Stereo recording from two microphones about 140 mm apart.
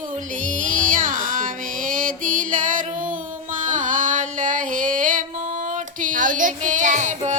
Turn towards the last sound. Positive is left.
turn(degrees=-60)  # may be behind; listen again after turning